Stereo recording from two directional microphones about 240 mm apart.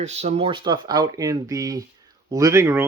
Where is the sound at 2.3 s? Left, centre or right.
Centre.